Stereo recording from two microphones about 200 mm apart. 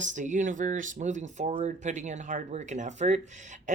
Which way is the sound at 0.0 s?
40° right (ahead or behind).